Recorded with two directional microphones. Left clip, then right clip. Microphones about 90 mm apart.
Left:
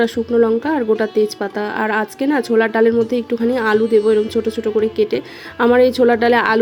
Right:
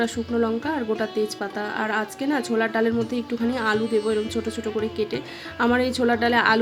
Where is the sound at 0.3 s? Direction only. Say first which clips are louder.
Left 9 dB; 35° left (ahead or behind).